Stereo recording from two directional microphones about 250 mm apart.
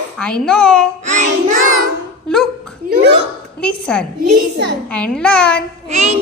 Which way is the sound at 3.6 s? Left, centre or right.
Centre.